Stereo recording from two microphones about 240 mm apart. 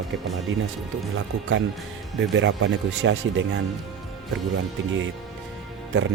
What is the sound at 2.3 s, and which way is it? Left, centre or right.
Speech, right.